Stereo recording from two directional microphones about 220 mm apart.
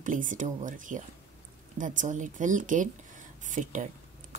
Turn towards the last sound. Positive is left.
turn(degrees=-35)  # may be behind; listen again after turning